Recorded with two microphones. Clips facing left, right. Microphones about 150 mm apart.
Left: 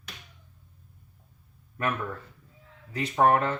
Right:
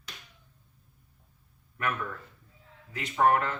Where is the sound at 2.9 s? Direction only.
35° left (ahead or behind).